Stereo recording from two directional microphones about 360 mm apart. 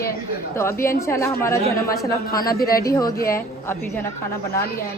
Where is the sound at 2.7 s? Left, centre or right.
Centre.